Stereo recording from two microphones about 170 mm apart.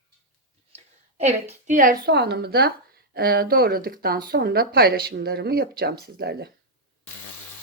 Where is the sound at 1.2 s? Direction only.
40° right (ahead or behind); by 6.3 s 70° right (ahead or behind).